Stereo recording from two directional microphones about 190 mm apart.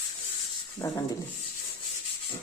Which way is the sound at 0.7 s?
15° left (ahead or behind).